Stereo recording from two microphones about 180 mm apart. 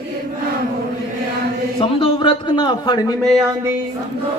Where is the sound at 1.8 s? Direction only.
30° left (ahead or behind).